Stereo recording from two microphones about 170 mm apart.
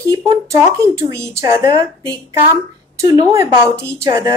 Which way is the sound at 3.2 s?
15° right (ahead or behind).